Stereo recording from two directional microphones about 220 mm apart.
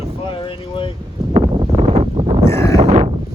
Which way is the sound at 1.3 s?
25° right (ahead or behind).